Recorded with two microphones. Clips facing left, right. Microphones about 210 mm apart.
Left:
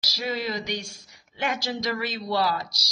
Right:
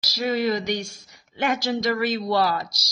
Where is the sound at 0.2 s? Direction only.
50° right (ahead or behind).